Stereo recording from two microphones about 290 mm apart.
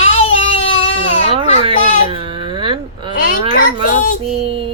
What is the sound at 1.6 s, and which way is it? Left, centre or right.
Baby cry, centre.